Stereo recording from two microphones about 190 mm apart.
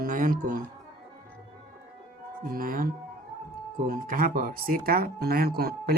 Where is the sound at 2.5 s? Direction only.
50° right (ahead or behind).